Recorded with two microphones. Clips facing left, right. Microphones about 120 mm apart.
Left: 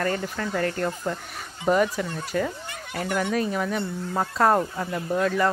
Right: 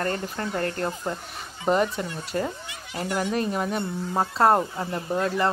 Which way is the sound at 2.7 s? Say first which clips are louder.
Left 1 dB; 55° left (ahead or behind).